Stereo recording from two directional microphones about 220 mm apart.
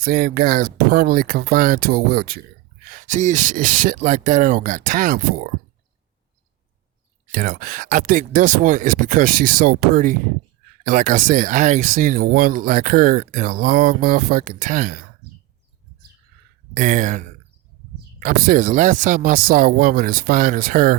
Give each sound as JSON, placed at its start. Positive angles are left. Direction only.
{"t": 0.0, "sound": "speech", "side_deg": -45}
{"t": 7.3, "sound": "speech", "side_deg": -40}
{"t": 16.7, "sound": "speech", "side_deg": -35}